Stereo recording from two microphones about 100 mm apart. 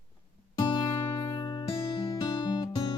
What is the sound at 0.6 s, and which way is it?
Music, 50° left (ahead or behind).